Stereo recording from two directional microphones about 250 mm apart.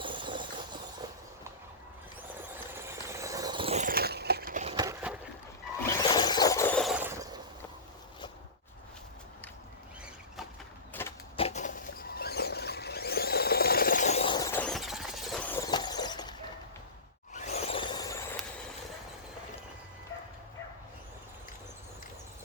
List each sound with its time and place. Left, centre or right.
0.0 s train: centre
2.7 s squeal: centre
6.0 s vehicle: centre
11.0 s wood: centre
11.3 s a sound: left
17.3 s a sound: left